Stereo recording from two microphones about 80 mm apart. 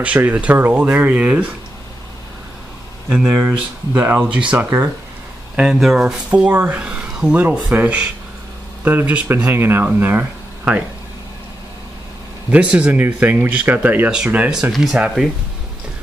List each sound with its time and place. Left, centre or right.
0.2 s speech: centre
3.1 s speech: centre
3.4 s speech: right
4.2 s speech: centre
4.6 s speech: right
5.6 s speech: centre; by 10.8 s right
12.4 s speech: centre
14.7 s speech: centre